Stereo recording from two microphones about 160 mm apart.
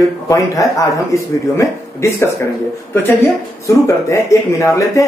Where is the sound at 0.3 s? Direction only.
20° left (ahead or behind).